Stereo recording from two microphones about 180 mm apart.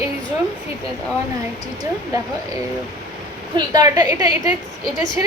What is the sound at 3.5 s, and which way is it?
Speech, 25° right (ahead or behind).